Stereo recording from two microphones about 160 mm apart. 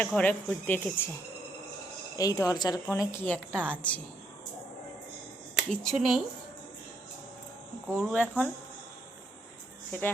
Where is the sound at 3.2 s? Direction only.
5° left (ahead or behind).